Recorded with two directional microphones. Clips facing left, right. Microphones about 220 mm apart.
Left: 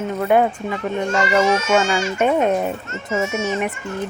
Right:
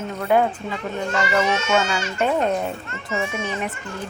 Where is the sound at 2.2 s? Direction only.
10° left (ahead or behind).